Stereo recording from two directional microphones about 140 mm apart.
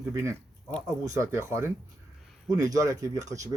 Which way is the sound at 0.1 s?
20° right (ahead or behind).